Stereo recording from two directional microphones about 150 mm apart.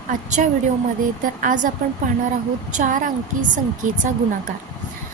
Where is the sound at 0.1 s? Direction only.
55° right (ahead or behind).